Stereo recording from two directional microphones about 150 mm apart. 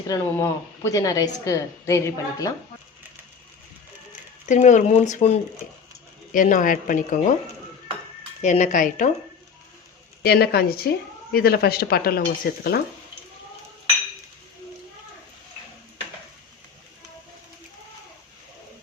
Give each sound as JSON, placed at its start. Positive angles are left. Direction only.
{"t": 0.3, "sound": "a woman's voice", "side_deg": 15}
{"t": 4.4, "sound": "speech", "side_deg": 55}
{"t": 6.3, "sound": "a woman's voice", "side_deg": 60}
{"t": 8.4, "sound": "a woman's voice", "side_deg": 55}
{"t": 10.2, "sound": "speech", "side_deg": 90}